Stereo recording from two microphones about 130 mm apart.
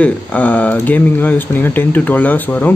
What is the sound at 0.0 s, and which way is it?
Speech, 10° left (ahead or behind).